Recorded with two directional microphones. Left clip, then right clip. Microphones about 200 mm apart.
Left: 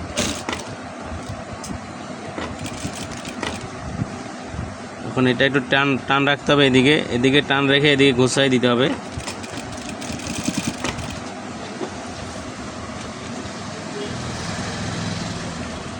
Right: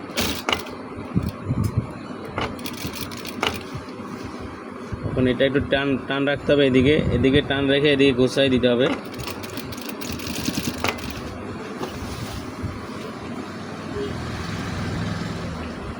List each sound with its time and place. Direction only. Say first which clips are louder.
5.2 s speech: left 2 dB; 40° left (ahead or behind)